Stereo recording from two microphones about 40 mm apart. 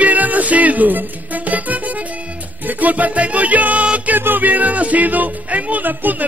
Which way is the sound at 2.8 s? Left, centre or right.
Right.